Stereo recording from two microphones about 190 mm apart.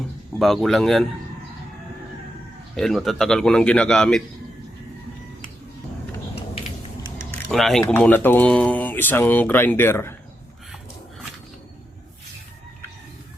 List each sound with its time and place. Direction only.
0.3 s speech: centre (ahead or behind)
2.7 s speech: centre (ahead or behind)
6.3 s a sound: 30° left (ahead or behind)
7.5 s speech: centre (ahead or behind)